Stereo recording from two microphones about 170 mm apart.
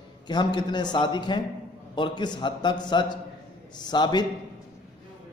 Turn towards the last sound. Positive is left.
turn(degrees=25)  # may be behind; listen again after turning